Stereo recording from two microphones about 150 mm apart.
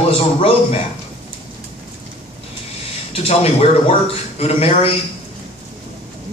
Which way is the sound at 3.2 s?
40° left (ahead or behind).